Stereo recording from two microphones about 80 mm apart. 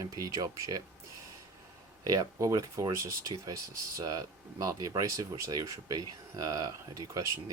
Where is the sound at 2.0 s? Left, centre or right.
Right.